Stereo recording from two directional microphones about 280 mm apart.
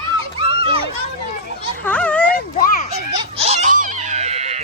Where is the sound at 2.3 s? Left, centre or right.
Left.